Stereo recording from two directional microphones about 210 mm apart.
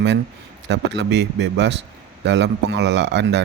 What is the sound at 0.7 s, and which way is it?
Speech, 55° right (ahead or behind).